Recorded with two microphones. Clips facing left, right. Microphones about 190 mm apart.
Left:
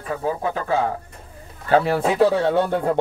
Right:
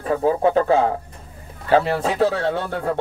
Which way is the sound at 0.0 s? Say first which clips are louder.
Right 6 dB; 30° right (ahead or behind).